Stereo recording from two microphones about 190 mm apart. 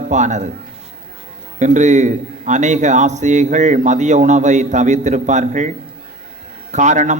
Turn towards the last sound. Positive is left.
turn(degrees=-40)  # may be behind; listen again after turning